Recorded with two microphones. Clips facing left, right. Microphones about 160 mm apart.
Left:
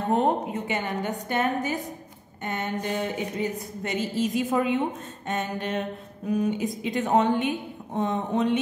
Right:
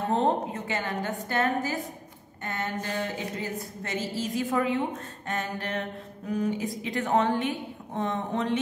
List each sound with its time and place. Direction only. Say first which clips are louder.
0.1 s a woman's voice: left 3 dB; 15° left (ahead or behind)